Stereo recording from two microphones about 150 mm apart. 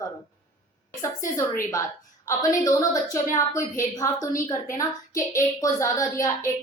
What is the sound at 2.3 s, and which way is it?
A woman's voice, 20° left (ahead or behind).